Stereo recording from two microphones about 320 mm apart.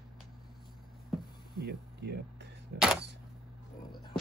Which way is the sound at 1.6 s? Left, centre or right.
Right.